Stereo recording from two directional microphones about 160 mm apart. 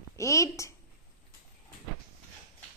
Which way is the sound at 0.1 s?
20° left (ahead or behind).